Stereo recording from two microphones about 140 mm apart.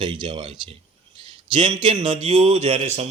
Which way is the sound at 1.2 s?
35° right (ahead or behind).